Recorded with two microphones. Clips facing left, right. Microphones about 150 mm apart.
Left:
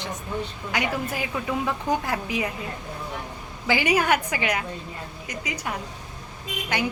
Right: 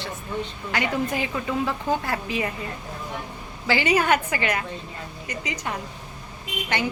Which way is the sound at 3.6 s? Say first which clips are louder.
Right 1 dB; 15° left (ahead or behind).